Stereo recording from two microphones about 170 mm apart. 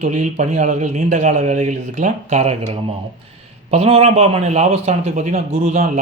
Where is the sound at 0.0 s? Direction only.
45° right (ahead or behind).